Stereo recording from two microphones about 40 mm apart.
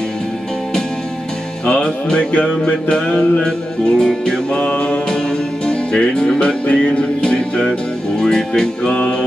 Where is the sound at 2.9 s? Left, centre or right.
Centre.